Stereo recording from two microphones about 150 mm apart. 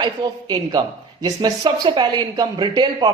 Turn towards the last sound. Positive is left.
turn(degrees=-30)  # may be behind; listen again after turning